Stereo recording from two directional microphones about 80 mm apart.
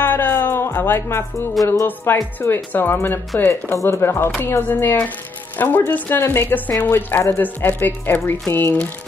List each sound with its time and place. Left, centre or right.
0.0 s music: left
2.1 s speech: left